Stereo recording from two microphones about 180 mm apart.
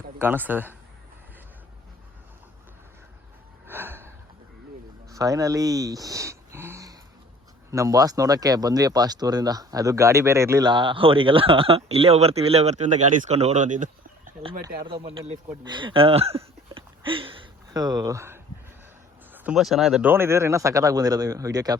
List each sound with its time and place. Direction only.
0.2 s a man's voice: 10° right (ahead or behind)
3.7 s gasp: 10° right (ahead or behind)
5.0 s a sound: 20° right (ahead or behind)
7.7 s speech: 20° right (ahead or behind); by 14.3 s 45° right (ahead or behind)
14.8 s speech: 30° right (ahead or behind)
15.6 s a sound: 25° right (ahead or behind)
19.3 s a man's voice: 5° right (ahead or behind); by 21.8 s 20° right (ahead or behind)